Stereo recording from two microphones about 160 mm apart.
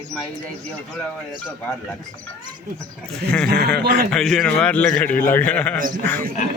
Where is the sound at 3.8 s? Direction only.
75° right (ahead or behind).